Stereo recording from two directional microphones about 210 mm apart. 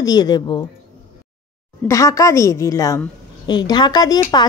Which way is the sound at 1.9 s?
15° left (ahead or behind).